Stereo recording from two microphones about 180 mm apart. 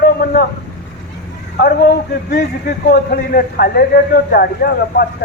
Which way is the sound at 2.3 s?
65° left (ahead or behind).